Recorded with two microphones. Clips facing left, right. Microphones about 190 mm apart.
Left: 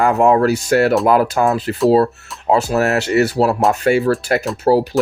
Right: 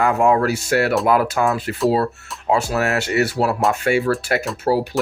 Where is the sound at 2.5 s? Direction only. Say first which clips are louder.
Left 4 dB; 35° left (ahead or behind).